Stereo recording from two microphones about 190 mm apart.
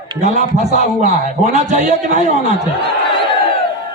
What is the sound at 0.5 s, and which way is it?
Speech, 40° right (ahead or behind).